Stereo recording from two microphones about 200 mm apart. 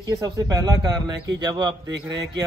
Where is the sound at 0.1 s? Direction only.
15° right (ahead or behind).